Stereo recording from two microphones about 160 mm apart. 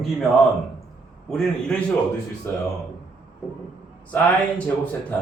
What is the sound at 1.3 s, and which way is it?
Speech, 5° left (ahead or behind).